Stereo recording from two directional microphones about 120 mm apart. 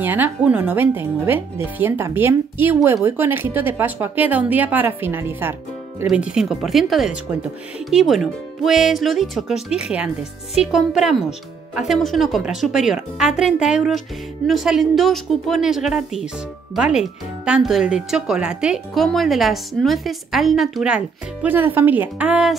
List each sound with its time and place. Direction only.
0.0 s speech: 15° right (ahead or behind)
6.0 s speech: 5° right (ahead or behind)